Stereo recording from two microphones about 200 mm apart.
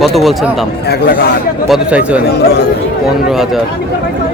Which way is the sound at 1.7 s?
5° right (ahead or behind).